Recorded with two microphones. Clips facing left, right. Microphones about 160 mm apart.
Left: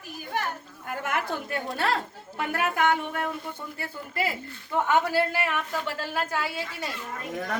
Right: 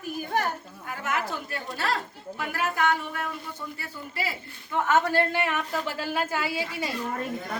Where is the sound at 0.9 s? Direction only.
55° left (ahead or behind).